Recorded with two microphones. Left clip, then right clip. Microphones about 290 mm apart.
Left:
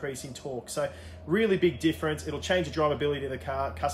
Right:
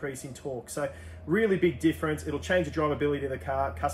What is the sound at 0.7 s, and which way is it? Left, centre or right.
Speech, centre.